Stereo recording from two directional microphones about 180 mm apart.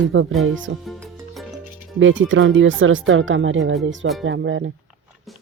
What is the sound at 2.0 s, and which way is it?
Speech, 90° right.